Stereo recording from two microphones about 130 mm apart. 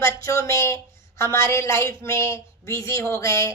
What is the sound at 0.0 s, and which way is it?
A woman's voice, 25° left (ahead or behind).